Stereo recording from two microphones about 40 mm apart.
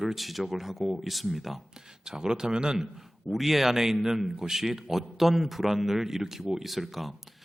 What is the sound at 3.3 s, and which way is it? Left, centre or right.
A man's voice, centre.